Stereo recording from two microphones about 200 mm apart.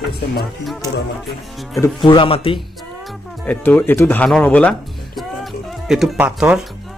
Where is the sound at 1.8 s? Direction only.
25° left (ahead or behind).